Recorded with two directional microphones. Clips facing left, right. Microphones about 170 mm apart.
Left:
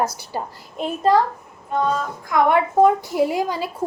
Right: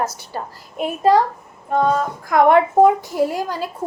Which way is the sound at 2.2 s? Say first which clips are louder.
Right 4 dB; 50° right (ahead or behind).